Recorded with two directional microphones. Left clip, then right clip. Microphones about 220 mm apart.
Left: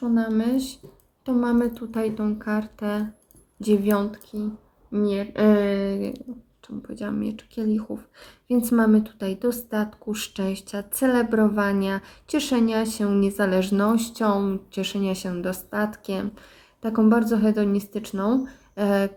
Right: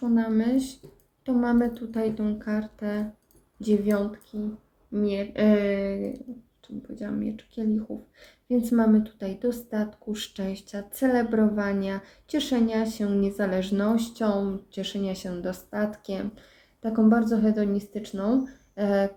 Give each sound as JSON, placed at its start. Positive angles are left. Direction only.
{"t": 0.1, "sound": "speech", "side_deg": 20}